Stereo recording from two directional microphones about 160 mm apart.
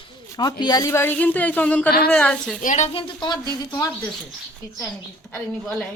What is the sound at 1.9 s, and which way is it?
Speech, 75° left (ahead or behind).